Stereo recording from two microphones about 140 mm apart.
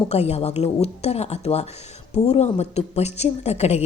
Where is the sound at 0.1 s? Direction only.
50° left (ahead or behind).